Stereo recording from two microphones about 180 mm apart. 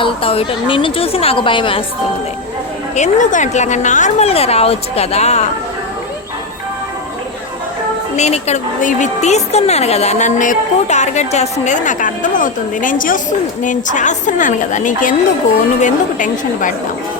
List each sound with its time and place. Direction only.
0.0 s a woman's voice: 30° left (ahead or behind)
2.9 s a woman's voice: 45° left (ahead or behind)
8.1 s a woman's voice: 40° left (ahead or behind)